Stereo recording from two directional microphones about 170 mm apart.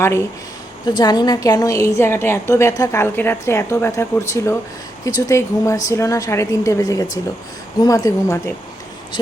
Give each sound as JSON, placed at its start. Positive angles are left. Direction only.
{"t": 0.0, "sound": "a woman's voice", "side_deg": 15}